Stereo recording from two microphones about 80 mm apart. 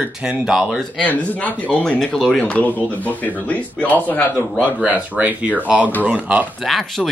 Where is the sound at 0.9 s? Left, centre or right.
Centre.